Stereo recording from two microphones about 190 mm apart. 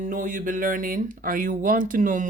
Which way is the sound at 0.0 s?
40° right (ahead or behind).